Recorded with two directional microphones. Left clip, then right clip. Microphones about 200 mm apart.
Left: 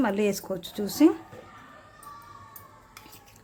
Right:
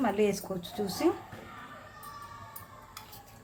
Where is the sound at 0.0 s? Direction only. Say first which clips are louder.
Left 2 dB; 55° left (ahead or behind).